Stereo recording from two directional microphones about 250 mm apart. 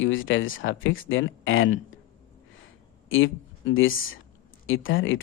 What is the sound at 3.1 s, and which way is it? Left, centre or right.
Speech, left.